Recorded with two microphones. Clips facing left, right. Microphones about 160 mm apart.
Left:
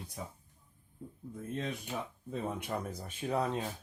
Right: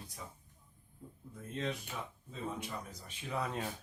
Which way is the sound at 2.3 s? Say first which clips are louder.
Left 5 dB; 55° left (ahead or behind).